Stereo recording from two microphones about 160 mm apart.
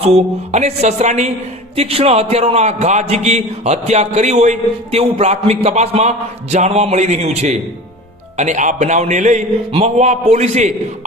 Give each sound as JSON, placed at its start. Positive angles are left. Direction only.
{"t": 0.1, "sound": "a man's voice", "side_deg": -40}